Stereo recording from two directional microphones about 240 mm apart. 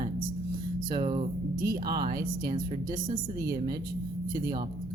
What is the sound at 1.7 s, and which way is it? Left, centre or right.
A woman's voice, right.